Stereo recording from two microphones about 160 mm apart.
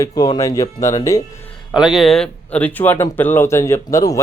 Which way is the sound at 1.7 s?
5° right (ahead or behind).